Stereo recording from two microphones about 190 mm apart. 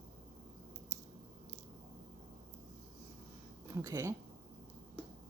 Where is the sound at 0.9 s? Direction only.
35° right (ahead or behind).